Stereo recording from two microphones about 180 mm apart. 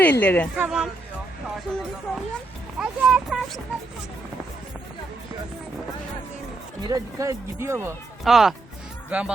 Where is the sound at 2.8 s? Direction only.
Centre (ahead or behind).